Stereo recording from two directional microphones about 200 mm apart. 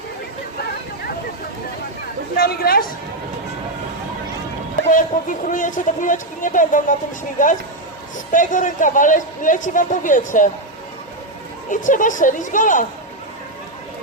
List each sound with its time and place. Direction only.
2.3 s speech: 45° left (ahead or behind)
5.5 s a man's voice: 40° left (ahead or behind)
11.7 s a man's voice: 40° left (ahead or behind)